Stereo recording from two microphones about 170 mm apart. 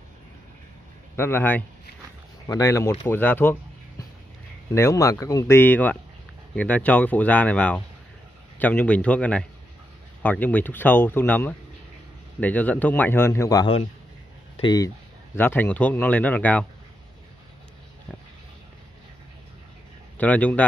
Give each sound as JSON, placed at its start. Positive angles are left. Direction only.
{"t": 1.1, "sound": "speech", "side_deg": 15}
{"t": 4.7, "sound": "speech", "side_deg": 15}
{"t": 15.3, "sound": "speech", "side_deg": 10}
{"t": 20.2, "sound": "speech", "side_deg": 10}